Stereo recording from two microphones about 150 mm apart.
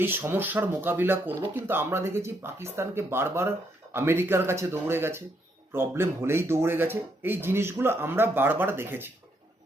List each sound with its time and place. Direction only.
0.0 s speech: 15° right (ahead or behind)